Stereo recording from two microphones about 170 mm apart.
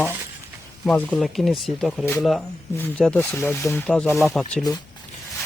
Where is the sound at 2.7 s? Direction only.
10° left (ahead or behind).